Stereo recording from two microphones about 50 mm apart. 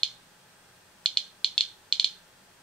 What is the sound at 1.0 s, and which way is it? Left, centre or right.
Music, centre.